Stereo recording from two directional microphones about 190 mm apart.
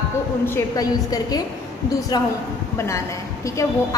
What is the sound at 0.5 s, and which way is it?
A woman's voice, 20° left (ahead or behind).